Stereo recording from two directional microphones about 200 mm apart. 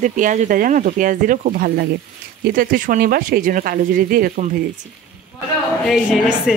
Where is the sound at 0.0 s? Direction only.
40° right (ahead or behind).